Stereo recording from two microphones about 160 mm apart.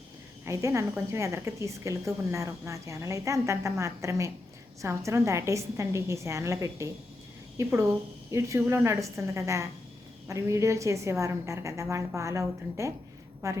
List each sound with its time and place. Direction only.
0.4 s a woman's voice: 20° right (ahead or behind)